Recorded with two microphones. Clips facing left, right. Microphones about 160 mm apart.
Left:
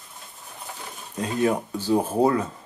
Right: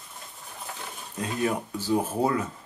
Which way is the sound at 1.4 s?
30° left (ahead or behind).